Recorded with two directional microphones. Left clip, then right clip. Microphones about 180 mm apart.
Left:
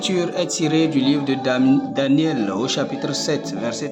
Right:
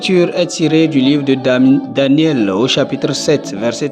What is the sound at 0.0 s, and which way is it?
A man's voice, 30° right (ahead or behind).